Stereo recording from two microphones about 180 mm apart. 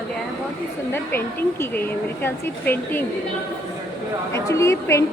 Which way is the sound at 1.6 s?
10° left (ahead or behind).